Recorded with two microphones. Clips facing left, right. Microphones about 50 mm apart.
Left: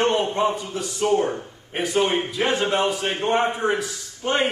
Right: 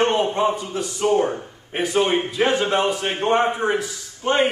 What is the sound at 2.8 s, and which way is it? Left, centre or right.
Speech, right.